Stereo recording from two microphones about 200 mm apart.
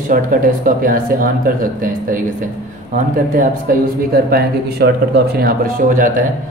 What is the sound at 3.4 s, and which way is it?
Speech, 45° right (ahead or behind).